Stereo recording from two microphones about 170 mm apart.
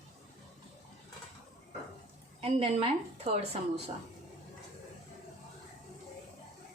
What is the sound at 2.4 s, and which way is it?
A woman's voice, 35° right (ahead or behind).